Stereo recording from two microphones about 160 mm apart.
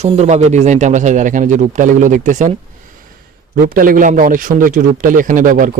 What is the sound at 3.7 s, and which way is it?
Speech, 60° right (ahead or behind).